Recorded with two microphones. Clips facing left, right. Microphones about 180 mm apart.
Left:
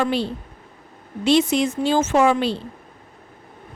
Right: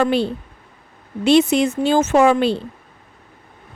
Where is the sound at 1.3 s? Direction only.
60° right (ahead or behind).